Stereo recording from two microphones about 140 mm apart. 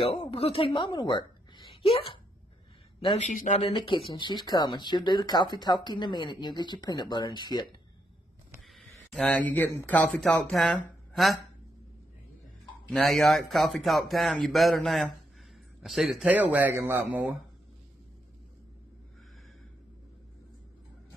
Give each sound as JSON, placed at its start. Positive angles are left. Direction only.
{"t": 0.0, "sound": "a woman's voice", "side_deg": 45}
{"t": 3.0, "sound": "speech", "side_deg": 55}
{"t": 3.6, "sound": "speech", "side_deg": 40}
{"t": 8.6, "sound": "speech", "side_deg": 0}
{"t": 12.9, "sound": "speech", "side_deg": 0}